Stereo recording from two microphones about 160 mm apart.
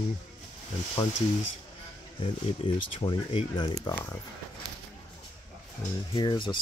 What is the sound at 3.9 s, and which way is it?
Speech, 20° left (ahead or behind).